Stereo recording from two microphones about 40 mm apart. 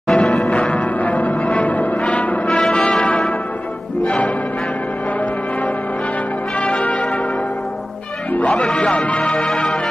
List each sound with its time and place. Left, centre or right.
0.1 s change ringing: left
3.0 s brass instrument: left
6.6 s church bell: left
8.5 s speech: left